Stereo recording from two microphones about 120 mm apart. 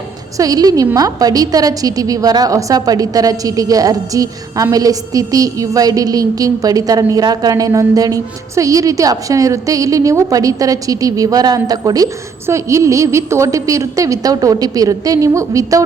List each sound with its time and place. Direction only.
0.3 s a woman's voice: 30° right (ahead or behind)